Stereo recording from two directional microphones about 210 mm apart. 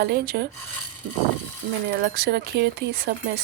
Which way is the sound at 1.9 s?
50° right (ahead or behind).